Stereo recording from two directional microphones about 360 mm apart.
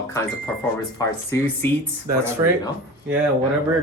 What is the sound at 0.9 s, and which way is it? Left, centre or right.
Speech, centre.